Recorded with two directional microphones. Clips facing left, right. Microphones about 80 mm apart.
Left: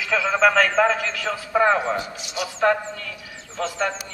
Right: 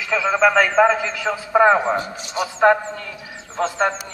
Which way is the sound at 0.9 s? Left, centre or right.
Centre.